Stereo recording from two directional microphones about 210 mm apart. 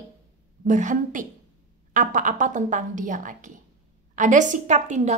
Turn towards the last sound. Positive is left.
turn(degrees=-35)  # may be behind; listen again after turning